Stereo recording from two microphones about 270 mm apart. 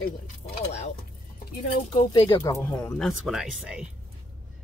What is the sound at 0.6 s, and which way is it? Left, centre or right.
Speech, left.